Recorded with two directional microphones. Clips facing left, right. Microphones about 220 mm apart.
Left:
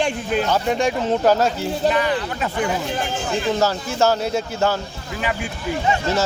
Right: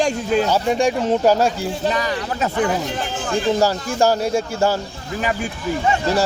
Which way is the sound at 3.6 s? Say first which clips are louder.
Right 2 dB; 10° right (ahead or behind).